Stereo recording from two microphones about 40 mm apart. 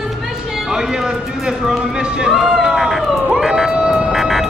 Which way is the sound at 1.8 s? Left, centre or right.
Right.